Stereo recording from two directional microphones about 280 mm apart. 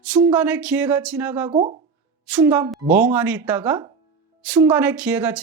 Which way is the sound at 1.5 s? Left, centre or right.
Right.